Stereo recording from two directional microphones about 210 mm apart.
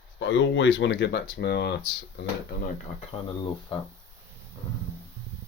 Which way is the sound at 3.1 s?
20° left (ahead or behind).